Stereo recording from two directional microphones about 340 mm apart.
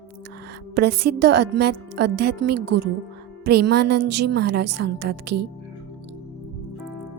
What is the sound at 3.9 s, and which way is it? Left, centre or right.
A woman's voice, right.